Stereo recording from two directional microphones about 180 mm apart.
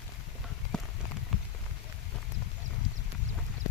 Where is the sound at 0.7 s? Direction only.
5° left (ahead or behind).